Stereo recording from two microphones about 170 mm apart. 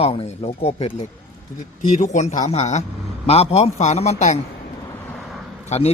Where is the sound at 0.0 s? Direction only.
35° left (ahead or behind).